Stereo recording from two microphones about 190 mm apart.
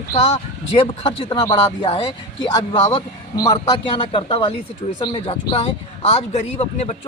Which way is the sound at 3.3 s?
20° left (ahead or behind).